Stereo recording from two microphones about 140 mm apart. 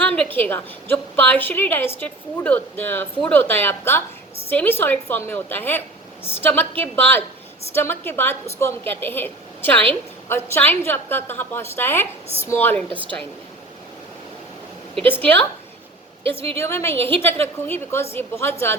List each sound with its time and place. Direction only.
0.0 s a sound: 10° left (ahead or behind)
0.3 s a woman's voice: 15° left (ahead or behind)
12.7 s a woman's voice: 40° right (ahead or behind)
14.9 s a woman's voice: 15° left (ahead or behind)
16.2 s a woman's voice: 40° right (ahead or behind)
16.6 s a woman's voice: 20° left (ahead or behind)